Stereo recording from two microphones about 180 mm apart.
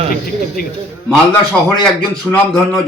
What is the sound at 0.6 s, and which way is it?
Speech, 55° left (ahead or behind).